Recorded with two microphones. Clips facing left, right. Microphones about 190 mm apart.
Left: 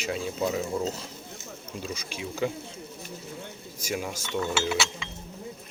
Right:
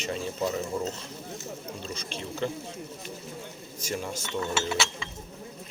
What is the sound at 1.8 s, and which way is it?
Speech, 10° left (ahead or behind).